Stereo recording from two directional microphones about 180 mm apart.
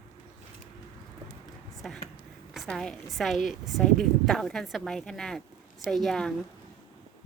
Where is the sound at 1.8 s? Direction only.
Centre (ahead or behind).